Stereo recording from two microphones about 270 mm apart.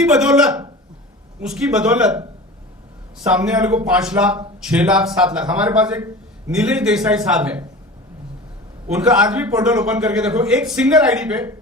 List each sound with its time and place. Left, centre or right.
0.0 s a man's voice: centre
3.2 s a man's voice: centre
8.9 s a man's voice: centre